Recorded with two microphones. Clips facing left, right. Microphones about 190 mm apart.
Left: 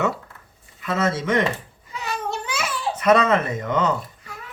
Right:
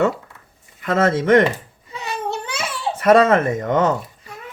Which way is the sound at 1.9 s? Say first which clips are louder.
Right 2 dB; 25° right (ahead or behind).